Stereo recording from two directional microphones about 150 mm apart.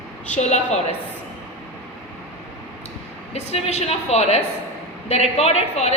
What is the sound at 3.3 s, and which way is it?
A woman's voice, 45° left (ahead or behind).